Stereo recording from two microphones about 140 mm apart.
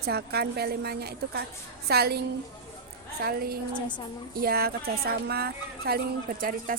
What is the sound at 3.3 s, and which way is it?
A woman's voice, 90° right.